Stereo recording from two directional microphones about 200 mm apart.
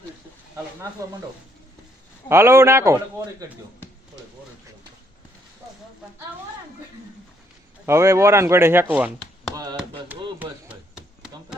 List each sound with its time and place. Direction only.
2.3 s speech: 15° right (ahead or behind)
7.9 s speech: 15° right (ahead or behind)
9.6 s chop: 20° right (ahead or behind)
10.4 s chopping: 5° right (ahead or behind)